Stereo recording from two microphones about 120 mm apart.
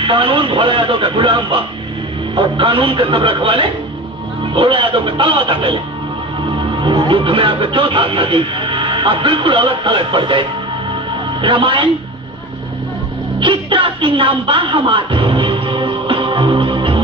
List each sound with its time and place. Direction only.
0.0 s speech: 45° right (ahead or behind)
6.8 s speech: 40° right (ahead or behind)
11.4 s speech: 45° right (ahead or behind)
13.4 s music: 45° right (ahead or behind)